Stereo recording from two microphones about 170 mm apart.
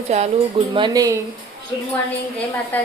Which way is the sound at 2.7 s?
10° left (ahead or behind).